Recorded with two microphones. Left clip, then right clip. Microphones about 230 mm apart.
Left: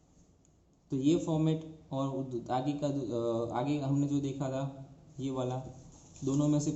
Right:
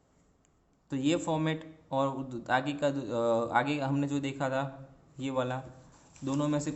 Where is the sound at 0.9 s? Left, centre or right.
Right.